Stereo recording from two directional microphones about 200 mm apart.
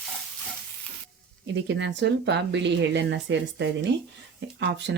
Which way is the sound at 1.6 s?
65° right (ahead or behind).